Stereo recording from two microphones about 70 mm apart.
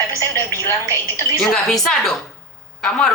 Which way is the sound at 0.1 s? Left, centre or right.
Left.